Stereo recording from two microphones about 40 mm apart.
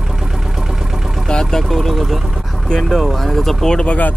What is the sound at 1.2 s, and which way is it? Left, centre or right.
Speech, centre.